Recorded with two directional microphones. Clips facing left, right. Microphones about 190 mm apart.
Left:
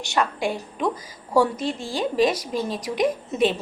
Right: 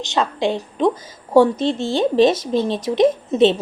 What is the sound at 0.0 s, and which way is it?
A woman's voice, 20° right (ahead or behind).